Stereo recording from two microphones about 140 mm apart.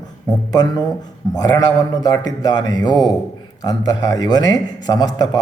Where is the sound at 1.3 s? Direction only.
25° left (ahead or behind).